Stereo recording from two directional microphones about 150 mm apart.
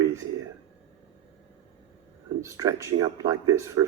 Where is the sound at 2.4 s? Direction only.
20° right (ahead or behind).